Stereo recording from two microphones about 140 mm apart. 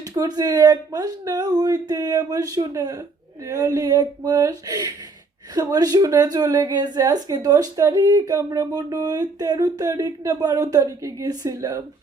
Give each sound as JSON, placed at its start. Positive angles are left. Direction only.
{"t": 0.1, "sound": "a woman's voice", "side_deg": -25}